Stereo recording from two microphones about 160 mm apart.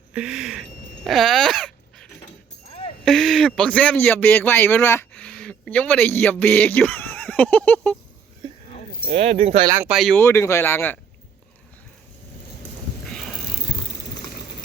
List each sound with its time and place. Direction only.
0.1 s a sound: 5° right (ahead or behind)
1.0 s dog: centre (ahead or behind)
3.0 s a man's voice: 5° left (ahead or behind)
9.0 s speech: 40° right (ahead or behind)
9.7 s speech: 10° right (ahead or behind)
10.2 s speech: 15° left (ahead or behind)
13.1 s a sound: centre (ahead or behind)